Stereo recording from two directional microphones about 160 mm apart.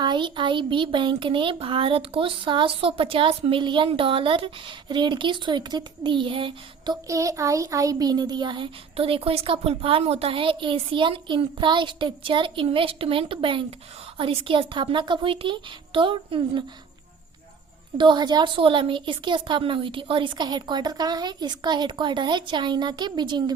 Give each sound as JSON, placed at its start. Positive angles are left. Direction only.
{"t": 0.0, "sound": "speech", "side_deg": -30}
{"t": 17.9, "sound": "a woman's voice", "side_deg": -30}